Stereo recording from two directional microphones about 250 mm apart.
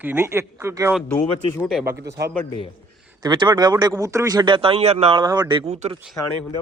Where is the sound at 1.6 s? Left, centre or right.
Centre.